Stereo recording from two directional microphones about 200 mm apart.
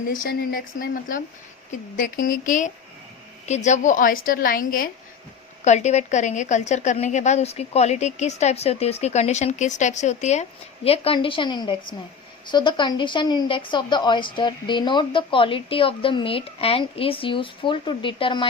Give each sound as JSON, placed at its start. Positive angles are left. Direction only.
{"t": 0.1, "sound": "a woman's voice", "side_deg": 45}